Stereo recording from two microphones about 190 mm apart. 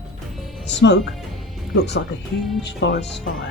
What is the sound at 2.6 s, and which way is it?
Speech, 65° left (ahead or behind).